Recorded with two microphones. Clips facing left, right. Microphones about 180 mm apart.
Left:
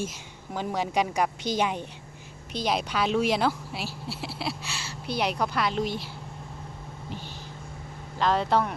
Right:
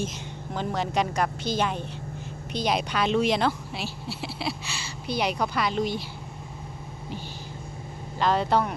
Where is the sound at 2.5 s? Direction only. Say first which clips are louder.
Right 1 dB; centre (ahead or behind).